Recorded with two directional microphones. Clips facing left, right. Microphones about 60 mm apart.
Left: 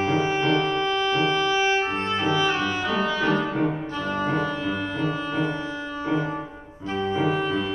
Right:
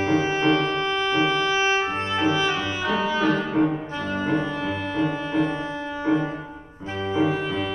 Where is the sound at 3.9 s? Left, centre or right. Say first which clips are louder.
Right 1 dB; centre.